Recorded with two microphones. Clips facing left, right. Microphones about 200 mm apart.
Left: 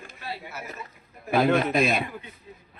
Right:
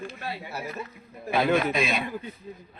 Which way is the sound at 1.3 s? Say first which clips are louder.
Left 2 dB; centre (ahead or behind).